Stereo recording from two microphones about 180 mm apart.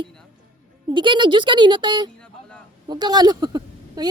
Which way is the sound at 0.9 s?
25° right (ahead or behind).